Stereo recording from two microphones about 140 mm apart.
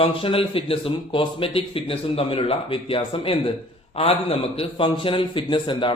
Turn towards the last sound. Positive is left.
turn(degrees=35)  # may be behind; listen again after turning